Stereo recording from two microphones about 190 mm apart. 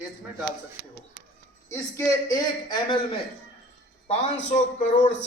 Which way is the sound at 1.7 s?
15° left (ahead or behind).